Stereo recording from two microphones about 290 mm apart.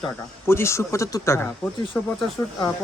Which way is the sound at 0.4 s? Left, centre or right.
Centre.